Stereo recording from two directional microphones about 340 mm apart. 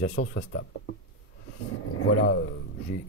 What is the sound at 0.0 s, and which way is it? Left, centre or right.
Speech, left.